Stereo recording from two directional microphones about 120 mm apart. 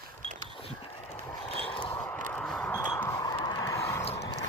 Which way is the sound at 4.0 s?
60° left (ahead or behind).